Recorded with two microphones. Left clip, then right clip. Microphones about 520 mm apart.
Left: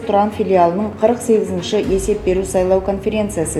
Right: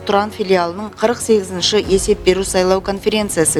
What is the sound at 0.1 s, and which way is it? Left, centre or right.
A woman's voice, right.